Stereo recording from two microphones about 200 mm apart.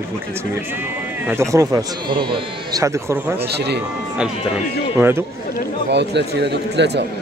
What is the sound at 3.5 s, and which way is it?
Speech, 55° right (ahead or behind).